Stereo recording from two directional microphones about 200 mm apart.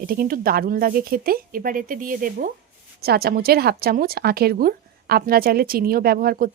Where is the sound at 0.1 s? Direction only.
45° right (ahead or behind).